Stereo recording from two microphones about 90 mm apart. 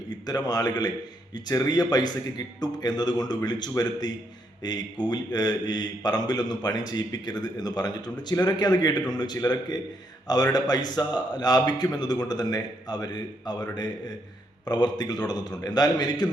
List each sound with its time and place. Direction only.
0.3 s a man's voice: 50° left (ahead or behind)